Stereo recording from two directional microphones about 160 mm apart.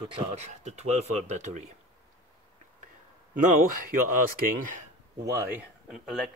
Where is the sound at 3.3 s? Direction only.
55° right (ahead or behind).